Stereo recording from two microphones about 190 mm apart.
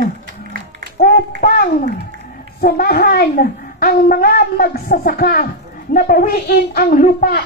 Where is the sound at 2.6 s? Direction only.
50° left (ahead or behind).